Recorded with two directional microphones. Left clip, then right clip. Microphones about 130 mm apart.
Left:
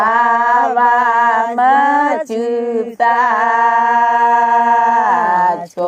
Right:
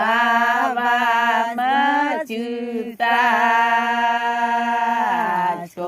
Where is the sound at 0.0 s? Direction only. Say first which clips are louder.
Left 5 dB; 25° left (ahead or behind).